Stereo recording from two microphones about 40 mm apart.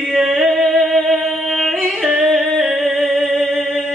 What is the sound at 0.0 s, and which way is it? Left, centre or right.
Yodeling, centre.